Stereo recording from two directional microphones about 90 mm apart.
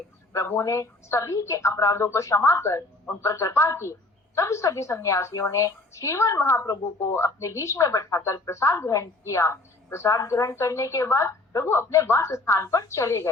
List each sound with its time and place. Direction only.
0.3 s a woman's voice: 30° left (ahead or behind)